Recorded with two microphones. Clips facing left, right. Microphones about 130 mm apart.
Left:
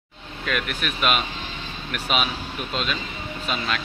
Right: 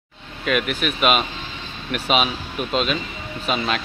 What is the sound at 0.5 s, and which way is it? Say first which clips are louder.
Speech: right 6 dB; 15° right (ahead or behind).